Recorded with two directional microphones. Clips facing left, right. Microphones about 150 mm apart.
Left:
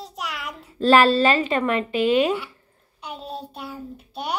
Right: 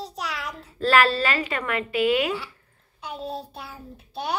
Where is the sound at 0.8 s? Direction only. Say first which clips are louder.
Left 5 dB; 25° left (ahead or behind).